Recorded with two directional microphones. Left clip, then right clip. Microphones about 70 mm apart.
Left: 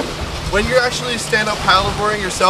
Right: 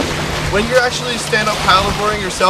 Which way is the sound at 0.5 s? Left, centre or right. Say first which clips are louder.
Right 1 dB; centre.